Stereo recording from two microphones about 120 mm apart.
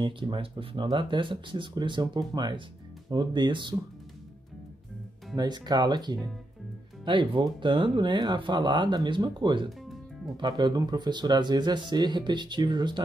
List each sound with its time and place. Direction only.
0.0 s speech: 45° right (ahead or behind)
5.3 s speech: 35° right (ahead or behind)
9.7 s music: centre (ahead or behind)
10.3 s speech: 35° right (ahead or behind)